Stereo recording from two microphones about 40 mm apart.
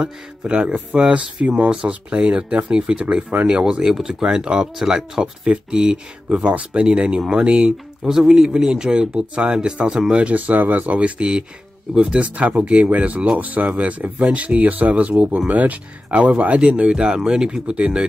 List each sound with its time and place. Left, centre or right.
0.5 s speech: right
3.2 s speech: right
3.4 s speech: right
3.8 s speech: centre
6.2 s speech: right
8.1 s speech: centre
10.3 s speech: right